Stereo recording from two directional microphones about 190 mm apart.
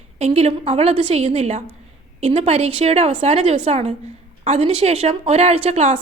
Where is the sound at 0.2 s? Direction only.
35° right (ahead or behind).